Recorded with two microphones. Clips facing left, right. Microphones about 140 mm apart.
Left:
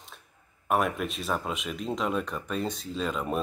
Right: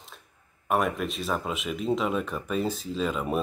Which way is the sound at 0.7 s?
Centre (ahead or behind).